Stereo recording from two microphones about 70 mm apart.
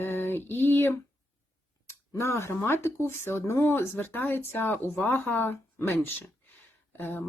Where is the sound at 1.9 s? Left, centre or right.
Left.